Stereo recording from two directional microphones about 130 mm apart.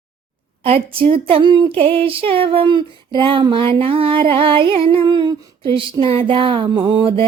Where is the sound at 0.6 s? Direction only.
45° right (ahead or behind).